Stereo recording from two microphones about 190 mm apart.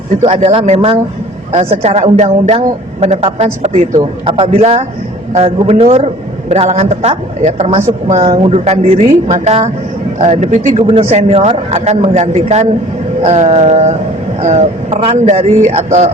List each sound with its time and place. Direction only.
0.2 s a woman's voice: 30° right (ahead or behind)